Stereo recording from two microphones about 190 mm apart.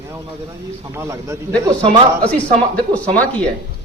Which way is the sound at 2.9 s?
10° left (ahead or behind).